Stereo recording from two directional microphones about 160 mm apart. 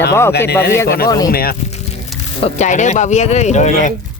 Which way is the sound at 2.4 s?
45° left (ahead or behind).